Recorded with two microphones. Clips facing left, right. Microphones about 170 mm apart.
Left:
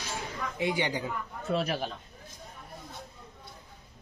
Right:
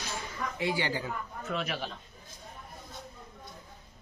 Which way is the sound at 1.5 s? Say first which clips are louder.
Left 5 dB; 35° left (ahead or behind).